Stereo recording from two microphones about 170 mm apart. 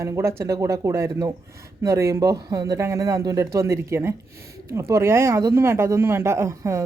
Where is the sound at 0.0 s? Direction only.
15° right (ahead or behind).